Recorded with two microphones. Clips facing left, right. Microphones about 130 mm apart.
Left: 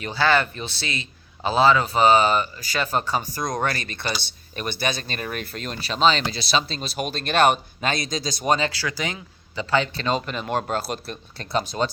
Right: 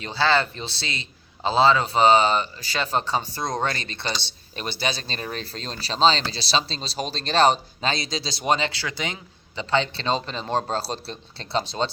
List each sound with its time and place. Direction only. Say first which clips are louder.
0.0 s a man's voice: left 1 dB; 25° right (ahead or behind)
4.7 s speech: left 1 dB; 50° left (ahead or behind)
5.0 s a man's voice: left 1 dB; 25° right (ahead or behind)
7.1 s speech: left 2 dB; 55° left (ahead or behind)
7.3 s a man's voice: even; 30° right (ahead or behind)
8.0 s speech: left 1 dB; 45° left (ahead or behind)
8.7 s a man's voice: left 2 dB; 25° right (ahead or behind)